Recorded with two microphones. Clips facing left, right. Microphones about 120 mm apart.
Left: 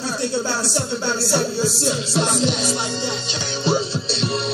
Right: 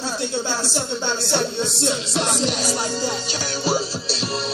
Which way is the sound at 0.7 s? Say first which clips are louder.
Left 2 dB; 5° left (ahead or behind).